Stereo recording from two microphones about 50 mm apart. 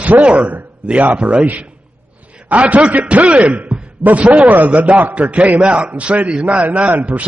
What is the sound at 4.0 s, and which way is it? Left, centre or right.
A man's voice, right.